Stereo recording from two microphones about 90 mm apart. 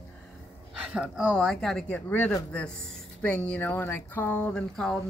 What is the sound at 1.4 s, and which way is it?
Speech, 5° left (ahead or behind).